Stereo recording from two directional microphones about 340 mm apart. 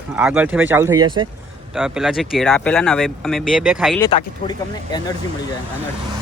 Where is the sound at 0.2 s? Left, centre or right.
Centre.